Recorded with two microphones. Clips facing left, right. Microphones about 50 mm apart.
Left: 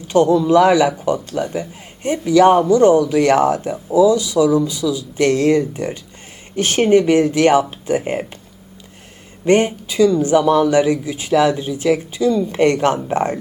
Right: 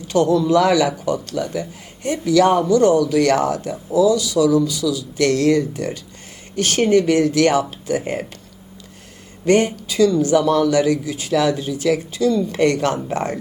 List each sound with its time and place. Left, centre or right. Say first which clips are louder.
0.1 s speech: left 3 dB; left
9.4 s speech: left 1 dB; left